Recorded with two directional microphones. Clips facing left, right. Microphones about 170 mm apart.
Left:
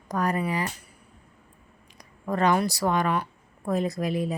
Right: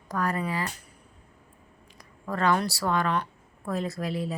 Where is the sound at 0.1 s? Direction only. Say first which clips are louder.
Left 2 dB; 20° left (ahead or behind).